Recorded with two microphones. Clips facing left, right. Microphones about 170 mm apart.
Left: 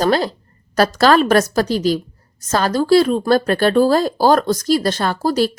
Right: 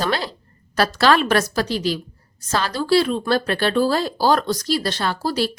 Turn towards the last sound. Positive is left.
turn(degrees=45)  # may be behind; listen again after turning